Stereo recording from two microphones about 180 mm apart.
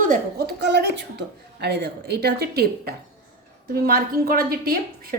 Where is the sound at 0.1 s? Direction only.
60° right (ahead or behind).